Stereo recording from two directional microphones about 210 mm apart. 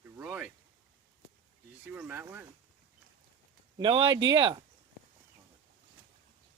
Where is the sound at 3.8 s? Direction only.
25° right (ahead or behind).